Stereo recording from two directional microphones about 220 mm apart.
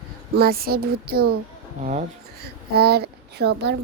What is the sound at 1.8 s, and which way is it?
Speech, 35° right (ahead or behind).